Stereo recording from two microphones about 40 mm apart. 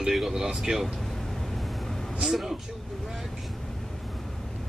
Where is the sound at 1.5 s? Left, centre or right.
Centre.